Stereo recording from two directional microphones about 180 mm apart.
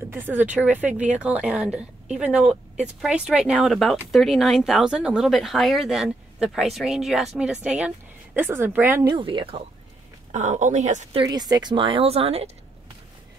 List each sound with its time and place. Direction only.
0.1 s a woman's voice: 10° right (ahead or behind)
9.0 s speech: 25° right (ahead or behind)
10.3 s a woman's voice: 40° right (ahead or behind)
11.1 s speech: 20° right (ahead or behind)